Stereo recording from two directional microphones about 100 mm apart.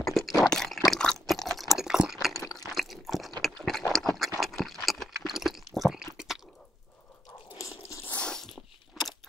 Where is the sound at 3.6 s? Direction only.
5° left (ahead or behind).